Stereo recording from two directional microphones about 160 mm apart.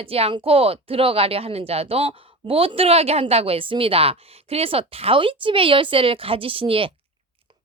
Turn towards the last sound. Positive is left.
turn(degrees=-35)  # may be behind; listen again after turning